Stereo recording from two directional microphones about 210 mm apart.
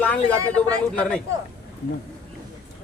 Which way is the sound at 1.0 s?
5° left (ahead or behind).